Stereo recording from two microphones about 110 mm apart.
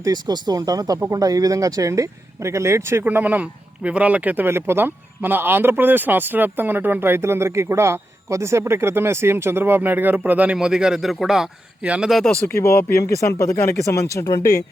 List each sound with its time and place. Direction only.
0.0 s speech: 35° right (ahead or behind); by 12.4 s centre (ahead or behind)
12.5 s speech: 25° left (ahead or behind)